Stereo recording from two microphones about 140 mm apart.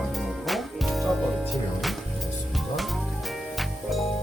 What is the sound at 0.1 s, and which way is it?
Music, centre (ahead or behind).